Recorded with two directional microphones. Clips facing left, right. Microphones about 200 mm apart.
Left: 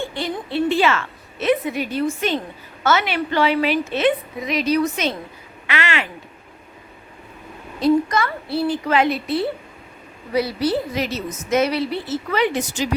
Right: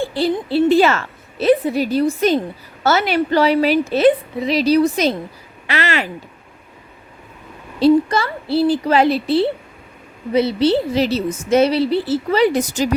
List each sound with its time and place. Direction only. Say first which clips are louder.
0.0 s a woman's voice: right 7 dB; 35° right (ahead or behind)
7.8 s a woman's voice: right 4 dB; 30° right (ahead or behind)